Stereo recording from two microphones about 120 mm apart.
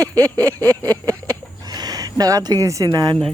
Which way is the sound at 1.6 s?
35° right (ahead or behind).